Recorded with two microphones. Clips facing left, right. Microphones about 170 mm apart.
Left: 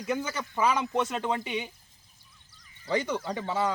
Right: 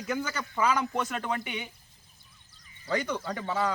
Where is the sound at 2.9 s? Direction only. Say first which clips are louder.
Left 2 dB; 25° left (ahead or behind).